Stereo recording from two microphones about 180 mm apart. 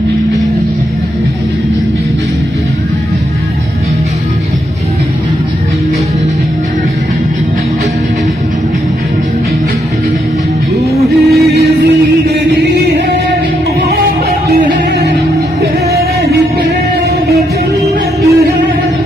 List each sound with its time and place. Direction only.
11.1 s music: centre (ahead or behind)
14.5 s music: 55° right (ahead or behind)
17.8 s music: 15° right (ahead or behind)